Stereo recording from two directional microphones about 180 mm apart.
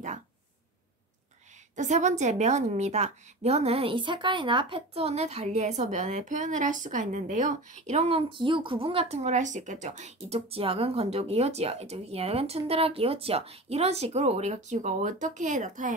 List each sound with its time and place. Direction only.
1.8 s a woman's voice: 40° right (ahead or behind)